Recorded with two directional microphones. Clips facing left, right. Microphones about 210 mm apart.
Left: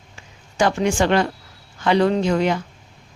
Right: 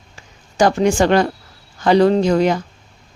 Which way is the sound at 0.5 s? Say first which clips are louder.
Right 4 dB; 40° right (ahead or behind).